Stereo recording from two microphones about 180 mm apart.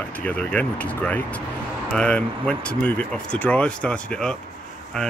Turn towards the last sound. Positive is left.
turn(degrees=5)  # may be behind; listen again after turning